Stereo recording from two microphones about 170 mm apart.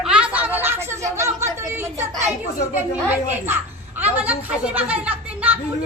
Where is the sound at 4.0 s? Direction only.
10° right (ahead or behind).